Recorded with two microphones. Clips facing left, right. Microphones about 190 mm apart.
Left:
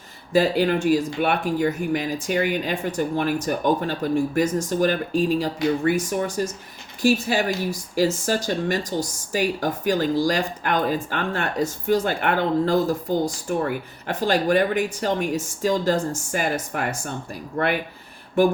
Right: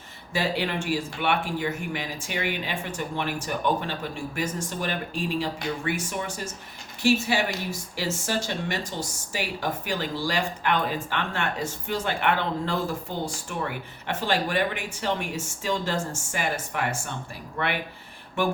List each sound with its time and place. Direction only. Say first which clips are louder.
0.3 s speech: left 8 dB; 40° left (ahead or behind)
9.0 s speech: left 8 dB; 45° left (ahead or behind)